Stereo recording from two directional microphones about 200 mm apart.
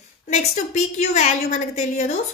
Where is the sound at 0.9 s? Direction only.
35° left (ahead or behind).